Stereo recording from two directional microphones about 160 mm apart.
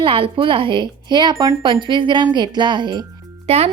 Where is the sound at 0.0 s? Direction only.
35° right (ahead or behind).